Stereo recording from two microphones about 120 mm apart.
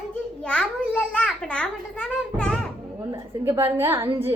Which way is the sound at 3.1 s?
20° right (ahead or behind).